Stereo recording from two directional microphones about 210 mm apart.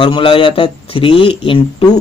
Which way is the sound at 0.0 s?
25° left (ahead or behind).